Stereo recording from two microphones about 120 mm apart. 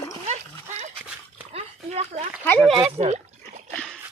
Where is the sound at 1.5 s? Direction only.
60° right (ahead or behind).